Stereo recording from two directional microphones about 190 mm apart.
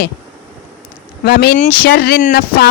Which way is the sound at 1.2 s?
55° left (ahead or behind).